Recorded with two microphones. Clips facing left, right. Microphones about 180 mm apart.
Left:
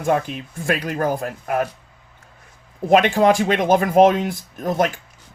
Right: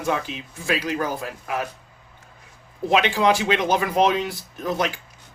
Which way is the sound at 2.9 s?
50° left (ahead or behind).